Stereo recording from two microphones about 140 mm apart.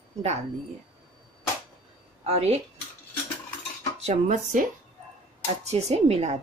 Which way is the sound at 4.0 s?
55° right (ahead or behind).